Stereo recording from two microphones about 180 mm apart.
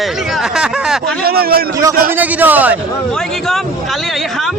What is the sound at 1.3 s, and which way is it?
Speech, 60° right (ahead or behind).